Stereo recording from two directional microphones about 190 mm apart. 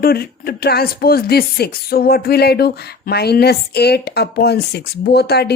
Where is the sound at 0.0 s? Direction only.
50° left (ahead or behind).